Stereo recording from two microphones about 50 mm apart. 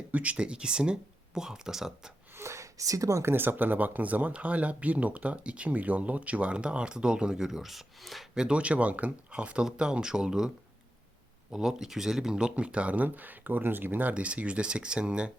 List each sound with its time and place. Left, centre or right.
0.1 s speech: right; by 1.9 s centre
2.4 s speech: right
3.3 s speech: right; by 8.2 s centre
8.4 s speech: right
11.5 s speech: centre; by 13.1 s right
13.1 s speech: right
14.1 s speech: right